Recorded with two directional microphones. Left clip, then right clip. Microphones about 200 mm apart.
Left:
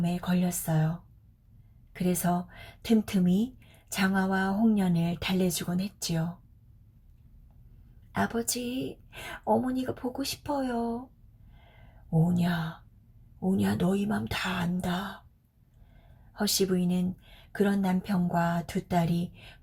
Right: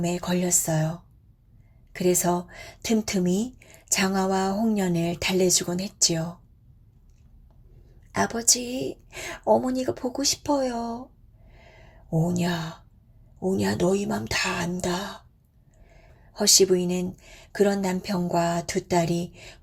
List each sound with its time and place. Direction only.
0.1 s a woman's voice: 35° right (ahead or behind)
8.1 s a woman's voice: 30° right (ahead or behind)
13.4 s a woman's voice: 30° right (ahead or behind)
16.3 s a woman's voice: 35° right (ahead or behind)